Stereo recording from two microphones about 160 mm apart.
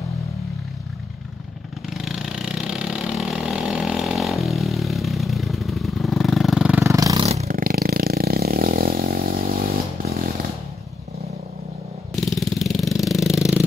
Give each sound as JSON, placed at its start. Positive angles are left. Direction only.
{"t": 2.0, "sound": "vehicle", "side_deg": 0}
{"t": 6.8, "sound": "vehicle", "side_deg": -20}
{"t": 7.2, "sound": "a sound", "side_deg": -40}
{"t": 7.5, "sound": "vehicle", "side_deg": -65}
{"t": 12.2, "sound": "vehicle", "side_deg": 0}